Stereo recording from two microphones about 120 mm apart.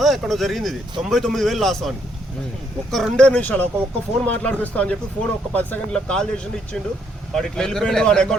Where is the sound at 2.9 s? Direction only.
5° left (ahead or behind).